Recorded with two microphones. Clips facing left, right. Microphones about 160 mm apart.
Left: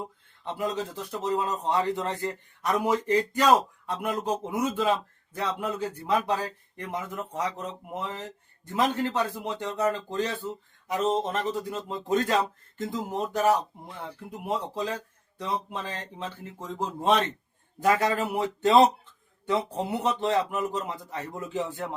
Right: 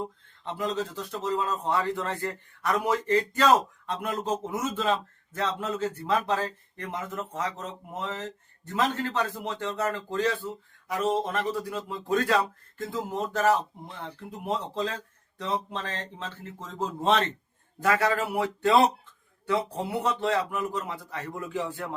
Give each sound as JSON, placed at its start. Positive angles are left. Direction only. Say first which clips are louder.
{"t": 0.4, "sound": "a man's voice", "louder": "even", "side_deg": 15}